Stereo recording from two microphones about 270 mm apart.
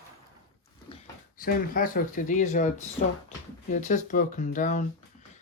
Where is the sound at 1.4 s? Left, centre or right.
Left.